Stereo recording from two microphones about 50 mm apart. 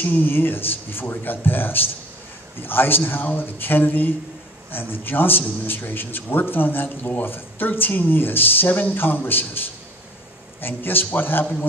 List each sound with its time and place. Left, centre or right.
0.0 s a man's voice: left